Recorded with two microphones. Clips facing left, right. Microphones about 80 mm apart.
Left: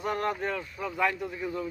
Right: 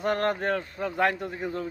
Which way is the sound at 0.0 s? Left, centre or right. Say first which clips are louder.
Right 4 dB; right.